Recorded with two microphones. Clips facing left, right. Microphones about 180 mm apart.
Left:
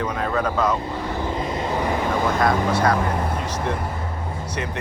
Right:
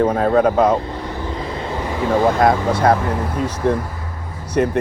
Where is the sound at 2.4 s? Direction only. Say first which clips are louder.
Right 4 dB; 50° right (ahead or behind).